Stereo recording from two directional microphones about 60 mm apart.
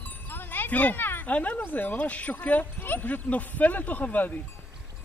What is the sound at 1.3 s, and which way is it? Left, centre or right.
Speech, left.